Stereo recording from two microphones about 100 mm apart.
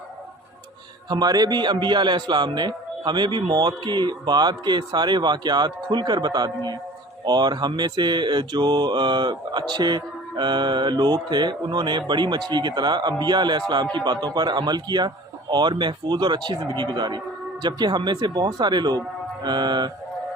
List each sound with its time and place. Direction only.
1.1 s mantra: 40° right (ahead or behind)